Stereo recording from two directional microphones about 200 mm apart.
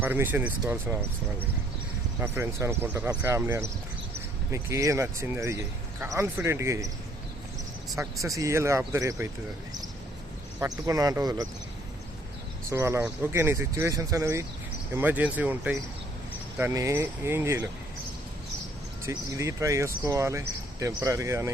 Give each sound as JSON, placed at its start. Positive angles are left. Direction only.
{"t": 0.0, "sound": "speech", "side_deg": -10}
{"t": 2.2, "sound": "speech", "side_deg": -10}
{"t": 8.2, "sound": "speech", "side_deg": -15}
{"t": 10.6, "sound": "speech", "side_deg": -15}
{"t": 12.7, "sound": "speech", "side_deg": -15}
{"t": 19.0, "sound": "speech", "side_deg": -15}